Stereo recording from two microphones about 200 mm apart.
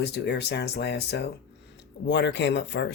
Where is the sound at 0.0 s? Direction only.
55° left (ahead or behind).